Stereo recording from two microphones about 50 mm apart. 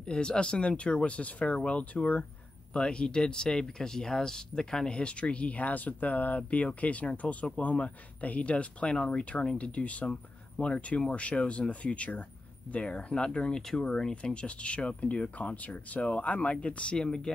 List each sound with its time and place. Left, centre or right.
0.0 s speech: centre
16.9 s speech: centre